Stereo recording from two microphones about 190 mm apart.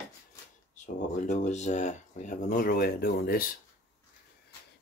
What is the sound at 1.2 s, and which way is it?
Speech, 40° left (ahead or behind).